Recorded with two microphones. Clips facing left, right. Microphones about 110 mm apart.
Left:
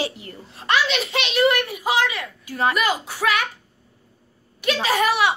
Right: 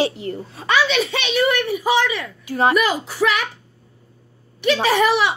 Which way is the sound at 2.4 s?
30° right (ahead or behind).